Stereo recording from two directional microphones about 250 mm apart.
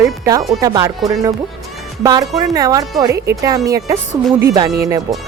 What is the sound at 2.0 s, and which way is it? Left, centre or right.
Speech, centre.